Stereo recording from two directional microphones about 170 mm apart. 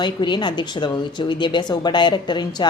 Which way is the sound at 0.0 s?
25° left (ahead or behind).